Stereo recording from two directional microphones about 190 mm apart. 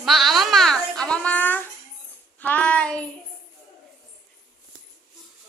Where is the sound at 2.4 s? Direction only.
10° left (ahead or behind).